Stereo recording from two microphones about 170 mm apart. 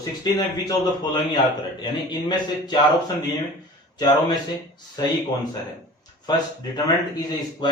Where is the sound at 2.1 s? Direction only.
25° left (ahead or behind).